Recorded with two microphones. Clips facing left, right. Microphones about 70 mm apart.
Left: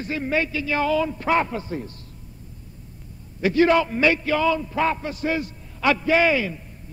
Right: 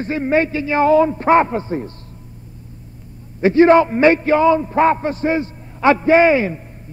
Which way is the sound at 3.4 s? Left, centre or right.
Right.